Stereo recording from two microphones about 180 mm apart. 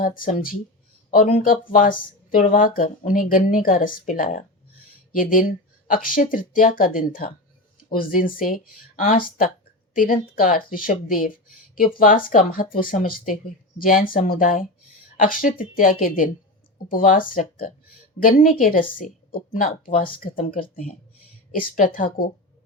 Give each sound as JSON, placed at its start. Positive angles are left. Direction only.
{"t": 0.0, "sound": "speech", "side_deg": 50}